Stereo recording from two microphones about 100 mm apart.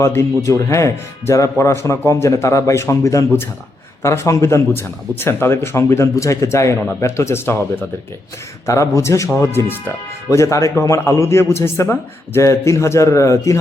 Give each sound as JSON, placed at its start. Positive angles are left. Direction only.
{"t": 0.0, "sound": "speech", "side_deg": 30}
{"t": 8.6, "sound": "speech", "side_deg": 30}